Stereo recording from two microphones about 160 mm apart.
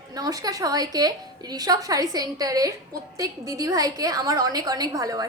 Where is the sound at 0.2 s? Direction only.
25° right (ahead or behind).